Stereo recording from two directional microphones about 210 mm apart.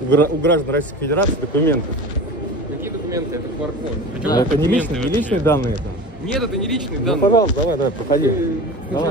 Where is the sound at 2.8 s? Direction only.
15° right (ahead or behind).